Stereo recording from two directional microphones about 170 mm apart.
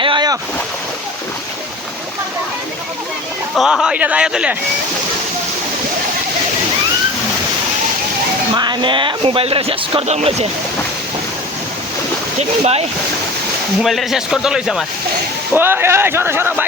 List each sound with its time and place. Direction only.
0.0 s boat: 25° right (ahead or behind)
3.5 s a man's voice: centre (ahead or behind)
8.5 s speech: 25° right (ahead or behind)
12.4 s speech: 40° right (ahead or behind)
13.8 s a man's voice: centre (ahead or behind)
15.5 s speech: 15° right (ahead or behind)